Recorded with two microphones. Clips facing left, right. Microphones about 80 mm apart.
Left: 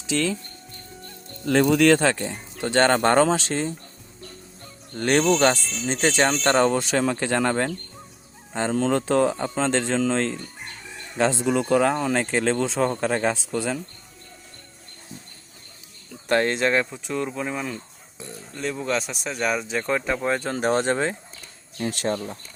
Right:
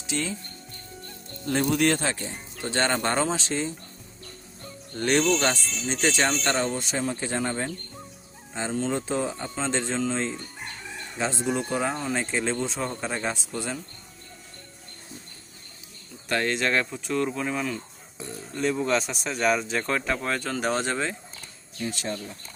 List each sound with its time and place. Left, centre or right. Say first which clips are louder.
0.1 s speech: left 6 dB; left
1.5 s speech: left 6 dB; left
4.9 s speech: left 3 dB; left
6.7 s speech: left 6 dB; left
16.3 s speech: left 4 dB; left
16.8 s speech: right 1 dB; centre
20.2 s speech: left 4 dB; left
21.8 s speech: left 6 dB; left